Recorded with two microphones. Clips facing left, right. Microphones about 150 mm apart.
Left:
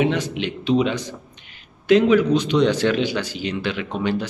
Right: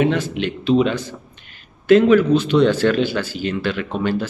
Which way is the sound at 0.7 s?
15° left (ahead or behind).